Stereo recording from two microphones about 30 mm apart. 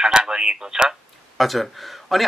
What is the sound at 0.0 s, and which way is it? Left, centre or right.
Speech, right.